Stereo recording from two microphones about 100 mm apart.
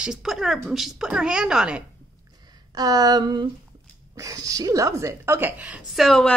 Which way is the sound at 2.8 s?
40° right (ahead or behind).